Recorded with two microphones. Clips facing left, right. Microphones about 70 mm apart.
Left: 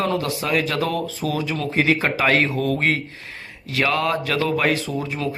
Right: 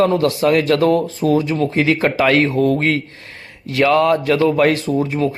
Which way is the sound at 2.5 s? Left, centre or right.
Right.